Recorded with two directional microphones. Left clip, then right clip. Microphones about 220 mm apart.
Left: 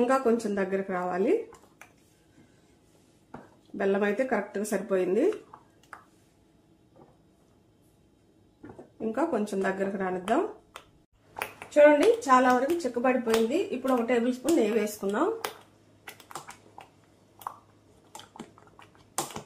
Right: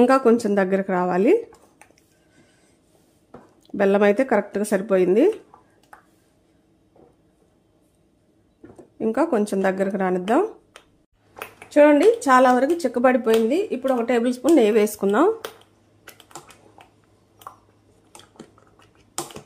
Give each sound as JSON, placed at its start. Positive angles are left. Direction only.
{"t": 0.0, "sound": "speech", "side_deg": -50}
{"t": 3.7, "sound": "speech", "side_deg": -50}
{"t": 8.9, "sound": "speech", "side_deg": -50}
{"t": 11.7, "sound": "speech", "side_deg": -55}